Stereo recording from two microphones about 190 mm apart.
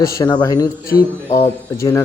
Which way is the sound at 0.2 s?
20° left (ahead or behind).